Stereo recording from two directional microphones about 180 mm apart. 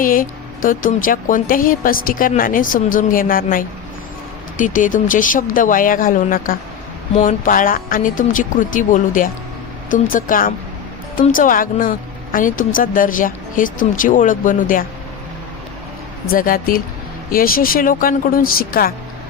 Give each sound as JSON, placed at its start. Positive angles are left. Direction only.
{"t": 0.0, "sound": "speech", "side_deg": 50}
{"t": 16.3, "sound": "speech", "side_deg": 50}